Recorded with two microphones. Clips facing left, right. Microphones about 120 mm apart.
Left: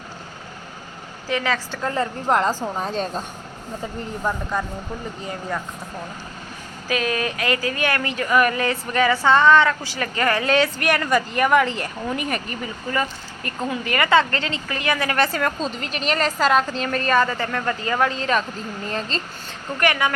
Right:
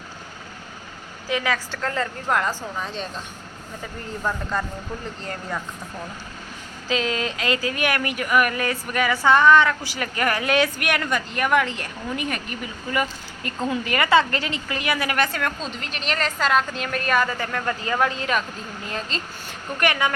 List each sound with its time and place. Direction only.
1.8 s a woman's voice: 20° left (ahead or behind)
2.2 s a woman's voice: 30° left (ahead or behind)
2.7 s a woman's voice: 40° left (ahead or behind)
4.2 s speech: 15° left (ahead or behind)
6.8 s speech: 20° right (ahead or behind)
10.8 s a woman's voice: centre (ahead or behind)
12.9 s a woman's voice: 15° right (ahead or behind)
15.2 s a woman's voice: 5° left (ahead or behind)
18.0 s speech: 15° right (ahead or behind)
18.9 s a woman's voice: 5° right (ahead or behind)
19.8 s a woman's voice: 20° right (ahead or behind)